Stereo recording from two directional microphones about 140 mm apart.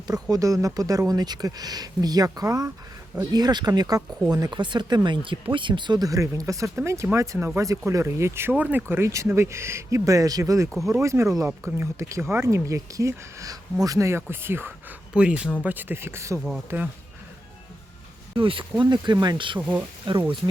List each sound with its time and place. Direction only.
0.1 s speech: 25° right (ahead or behind)
18.3 s speech: 40° right (ahead or behind)
20.4 s speech: 20° right (ahead or behind)